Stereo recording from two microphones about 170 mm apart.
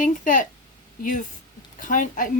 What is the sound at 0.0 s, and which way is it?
Speech, 50° left (ahead or behind).